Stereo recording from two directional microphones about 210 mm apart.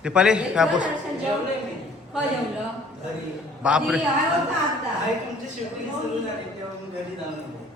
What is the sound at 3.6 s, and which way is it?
Speech, 5° right (ahead or behind).